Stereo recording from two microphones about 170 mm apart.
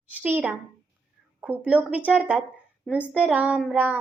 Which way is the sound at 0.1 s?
10° right (ahead or behind).